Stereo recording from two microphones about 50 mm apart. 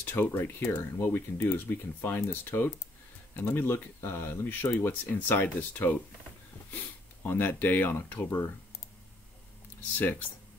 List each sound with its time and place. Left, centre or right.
0.0 s speech: left
5.0 s speech: left
9.9 s speech: left